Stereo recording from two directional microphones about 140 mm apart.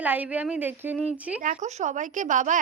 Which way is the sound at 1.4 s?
60° right (ahead or behind).